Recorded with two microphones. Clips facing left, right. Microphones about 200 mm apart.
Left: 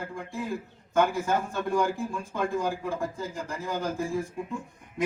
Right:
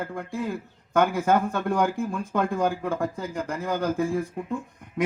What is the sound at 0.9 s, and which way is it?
A man's voice, 55° right (ahead or behind).